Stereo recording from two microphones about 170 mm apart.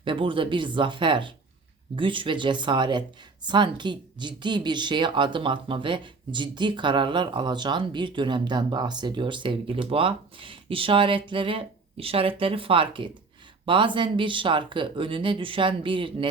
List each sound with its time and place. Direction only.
0.0 s speech: 30° right (ahead or behind)